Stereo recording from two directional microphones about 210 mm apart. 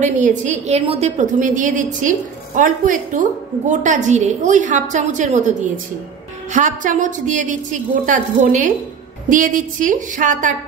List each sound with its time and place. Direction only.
0.0 s a woman's voice: 35° right (ahead or behind)